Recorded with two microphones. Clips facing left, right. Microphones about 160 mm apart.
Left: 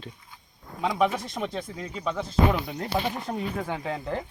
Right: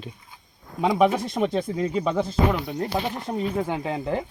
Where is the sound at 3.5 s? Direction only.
20° right (ahead or behind).